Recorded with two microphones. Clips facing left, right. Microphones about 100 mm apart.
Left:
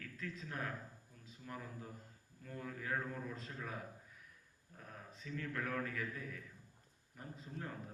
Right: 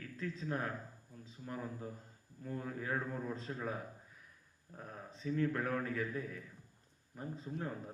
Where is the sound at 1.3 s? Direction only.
30° right (ahead or behind).